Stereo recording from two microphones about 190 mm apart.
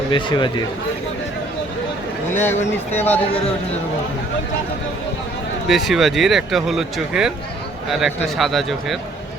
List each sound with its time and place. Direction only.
0.1 s speech: 25° left (ahead or behind)
2.3 s speech: 10° left (ahead or behind)
5.6 s speech: centre (ahead or behind)